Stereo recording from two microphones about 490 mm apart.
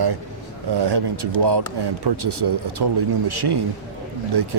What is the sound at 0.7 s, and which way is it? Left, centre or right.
Speech, right.